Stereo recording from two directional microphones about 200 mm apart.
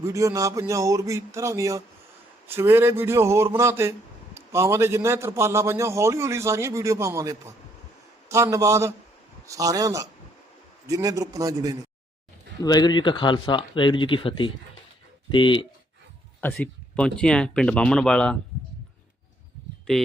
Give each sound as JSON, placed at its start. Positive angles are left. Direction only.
{"t": 0.0, "sound": "a man's voice", "side_deg": -15}
{"t": 12.6, "sound": "speech", "side_deg": 20}
{"t": 16.4, "sound": "speech", "side_deg": 5}